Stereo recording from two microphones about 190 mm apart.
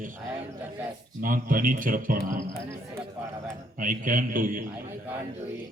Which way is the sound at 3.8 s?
45° right (ahead or behind).